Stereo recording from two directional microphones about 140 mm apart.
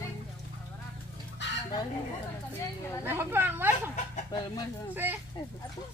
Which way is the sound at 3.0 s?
15° right (ahead or behind).